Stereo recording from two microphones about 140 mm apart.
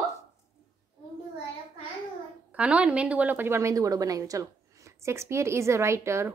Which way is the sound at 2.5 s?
10° right (ahead or behind).